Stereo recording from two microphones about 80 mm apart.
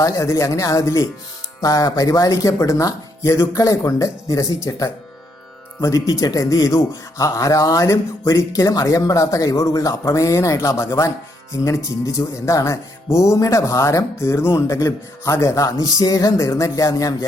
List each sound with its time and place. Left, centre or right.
0.0 s speech: left